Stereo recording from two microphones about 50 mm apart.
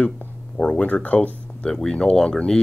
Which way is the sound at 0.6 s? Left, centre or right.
Left.